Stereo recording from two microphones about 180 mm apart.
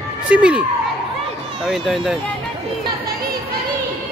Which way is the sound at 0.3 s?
5° right (ahead or behind).